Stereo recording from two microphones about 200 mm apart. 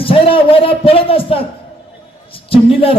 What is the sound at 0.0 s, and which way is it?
A man's voice, 25° left (ahead or behind).